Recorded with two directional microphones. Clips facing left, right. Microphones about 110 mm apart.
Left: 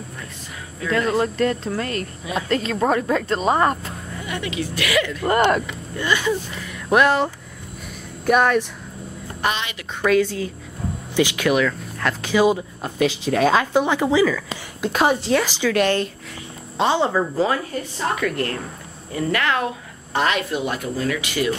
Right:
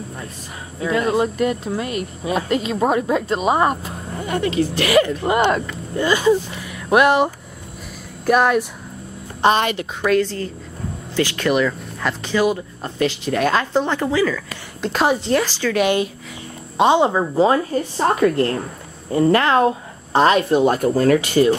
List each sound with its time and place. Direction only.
0.7 s speech: 20° right (ahead or behind)
4.1 s speech: 40° right (ahead or behind)
5.3 s speech: centre (ahead or behind)
5.9 s speech: 30° right (ahead or behind)
6.6 s a sound: 10° right (ahead or behind)
8.3 s speech: 5° right (ahead or behind)
9.4 s a woman's voice: 25° right (ahead or behind)
10.0 s speech: centre (ahead or behind)
12.4 s speech: 10° left (ahead or behind)
15.4 s speech: 15° left (ahead or behind)
15.7 s a woman's voice: 10° right (ahead or behind); by 21.5 s 35° right (ahead or behind)